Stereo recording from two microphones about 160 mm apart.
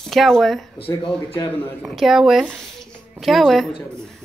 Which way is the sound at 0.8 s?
10° left (ahead or behind).